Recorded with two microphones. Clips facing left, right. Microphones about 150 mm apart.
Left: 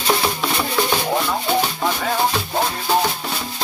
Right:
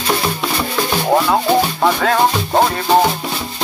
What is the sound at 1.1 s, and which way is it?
Music, 70° right (ahead or behind).